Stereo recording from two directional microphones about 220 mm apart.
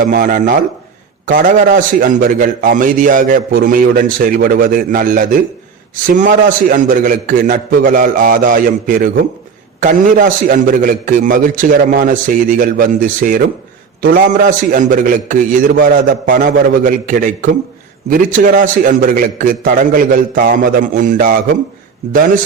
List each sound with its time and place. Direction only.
0.0 s a man's voice: 35° right (ahead or behind)